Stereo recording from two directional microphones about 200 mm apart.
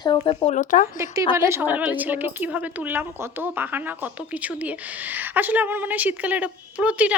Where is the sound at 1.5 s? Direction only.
10° right (ahead or behind).